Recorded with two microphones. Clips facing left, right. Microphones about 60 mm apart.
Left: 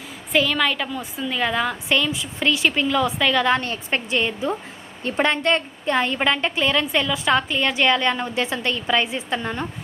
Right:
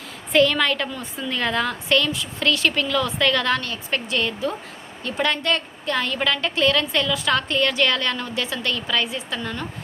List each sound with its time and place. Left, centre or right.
0.3 s a woman's voice: centre
3.6 s a woman's voice: left